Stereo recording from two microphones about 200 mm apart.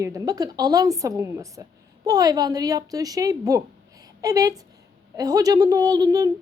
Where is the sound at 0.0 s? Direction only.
15° right (ahead or behind).